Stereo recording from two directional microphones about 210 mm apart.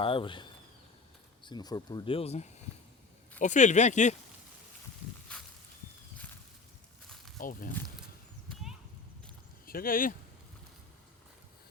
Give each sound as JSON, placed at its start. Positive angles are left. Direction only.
{"t": 0.0, "sound": "speech", "side_deg": 25}
{"t": 5.3, "sound": "walk", "side_deg": 5}
{"t": 7.3, "sound": "speech", "side_deg": 40}
{"t": 7.9, "sound": "horse", "side_deg": 0}
{"t": 9.6, "sound": "speech", "side_deg": 45}